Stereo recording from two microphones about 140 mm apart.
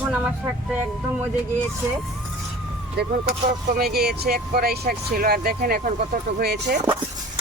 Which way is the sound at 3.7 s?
90° right.